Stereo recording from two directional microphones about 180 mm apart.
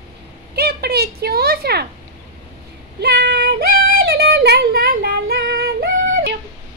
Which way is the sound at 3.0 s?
65° right (ahead or behind).